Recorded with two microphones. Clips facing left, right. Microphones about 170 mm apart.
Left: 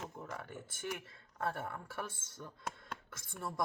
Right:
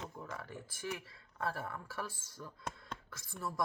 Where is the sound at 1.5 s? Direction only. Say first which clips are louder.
Left 1 dB; 25° left (ahead or behind).